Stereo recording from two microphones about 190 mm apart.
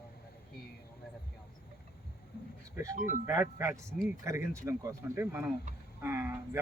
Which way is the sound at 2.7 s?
15° right (ahead or behind).